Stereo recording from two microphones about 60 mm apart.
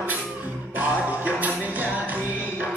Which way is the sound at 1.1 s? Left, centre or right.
Right.